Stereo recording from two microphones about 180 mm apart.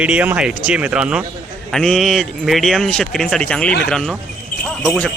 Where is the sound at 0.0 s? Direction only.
5° right (ahead or behind).